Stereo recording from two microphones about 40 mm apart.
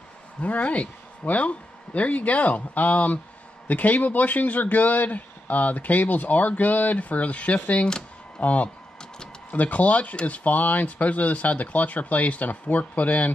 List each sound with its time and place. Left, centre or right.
0.4 s speech: left